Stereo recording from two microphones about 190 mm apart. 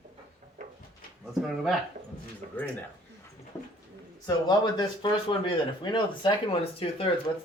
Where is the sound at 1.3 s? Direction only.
Centre (ahead or behind).